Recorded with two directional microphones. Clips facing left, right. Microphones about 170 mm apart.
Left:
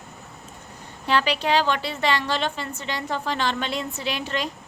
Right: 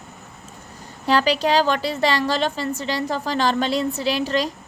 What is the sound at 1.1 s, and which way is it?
A woman's voice, 40° right (ahead or behind).